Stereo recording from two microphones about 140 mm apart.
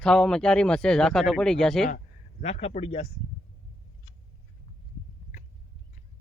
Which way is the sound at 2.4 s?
50° left (ahead or behind).